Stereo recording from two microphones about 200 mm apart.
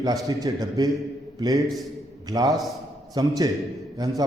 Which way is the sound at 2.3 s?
20° right (ahead or behind).